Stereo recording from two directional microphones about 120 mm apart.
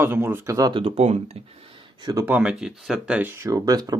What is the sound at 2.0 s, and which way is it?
Speech, 35° right (ahead or behind).